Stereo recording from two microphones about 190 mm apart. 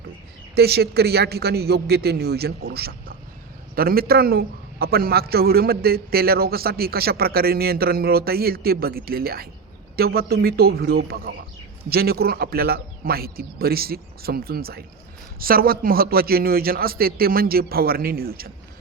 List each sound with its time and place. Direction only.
0.5 s a man's voice: 55° right (ahead or behind)